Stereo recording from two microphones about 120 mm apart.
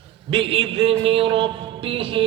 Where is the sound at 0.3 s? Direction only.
50° right (ahead or behind).